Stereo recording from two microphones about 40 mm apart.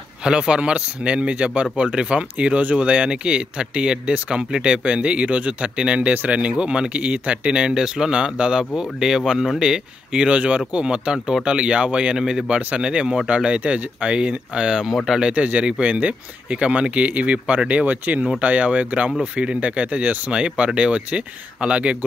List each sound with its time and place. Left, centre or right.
0.2 s speech: right
15.2 s speech: right